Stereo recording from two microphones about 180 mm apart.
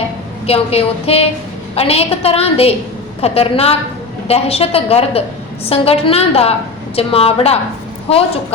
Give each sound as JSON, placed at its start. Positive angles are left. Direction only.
{"t": 0.4, "sound": "a woman's voice", "side_deg": 35}